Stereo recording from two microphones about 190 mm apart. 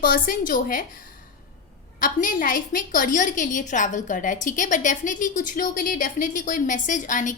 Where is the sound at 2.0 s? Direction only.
45° left (ahead or behind).